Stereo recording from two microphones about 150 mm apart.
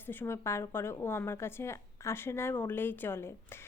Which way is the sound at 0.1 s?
15° left (ahead or behind).